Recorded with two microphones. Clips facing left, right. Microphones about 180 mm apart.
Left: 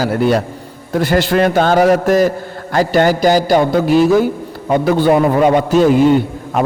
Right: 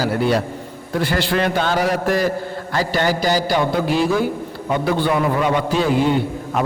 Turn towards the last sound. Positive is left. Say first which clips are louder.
# left 5 dB
turn(degrees=45)  # may be behind; listen again after turning